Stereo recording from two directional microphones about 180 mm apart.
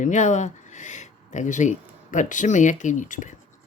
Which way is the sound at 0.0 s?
40° left (ahead or behind).